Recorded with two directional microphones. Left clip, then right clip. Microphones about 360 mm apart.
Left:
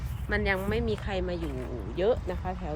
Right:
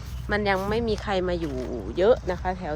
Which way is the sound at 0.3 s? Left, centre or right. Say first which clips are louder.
Right 4 dB; centre.